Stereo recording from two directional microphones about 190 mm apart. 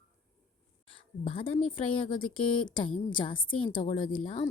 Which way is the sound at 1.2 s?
30° left (ahead or behind).